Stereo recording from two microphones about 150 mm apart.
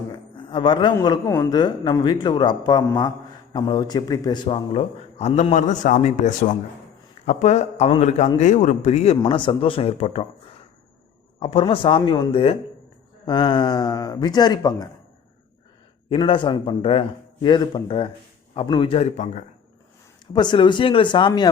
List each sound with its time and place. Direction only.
0.1 s a sound: 30° left (ahead or behind)
1.5 s a man's voice: 25° left (ahead or behind); by 9.1 s 45° left (ahead or behind)
9.2 s a man's voice: 35° left (ahead or behind)
11.3 s a man's voice: 40° left (ahead or behind)
16.0 s a man's voice: 35° left (ahead or behind); by 19.5 s 55° left (ahead or behind)
20.3 s a man's voice: 30° left (ahead or behind)